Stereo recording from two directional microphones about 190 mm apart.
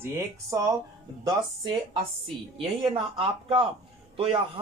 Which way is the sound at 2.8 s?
25° right (ahead or behind).